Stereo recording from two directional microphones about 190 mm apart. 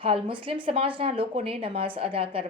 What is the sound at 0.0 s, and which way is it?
A woman's voice, 25° right (ahead or behind).